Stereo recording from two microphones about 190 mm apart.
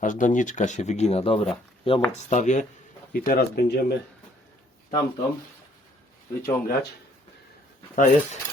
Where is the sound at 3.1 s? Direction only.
55° left (ahead or behind).